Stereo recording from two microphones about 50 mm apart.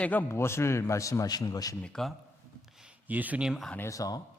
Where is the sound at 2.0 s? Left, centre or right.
Centre.